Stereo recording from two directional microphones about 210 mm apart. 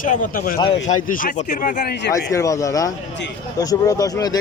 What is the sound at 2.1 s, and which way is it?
Speech, 15° left (ahead or behind).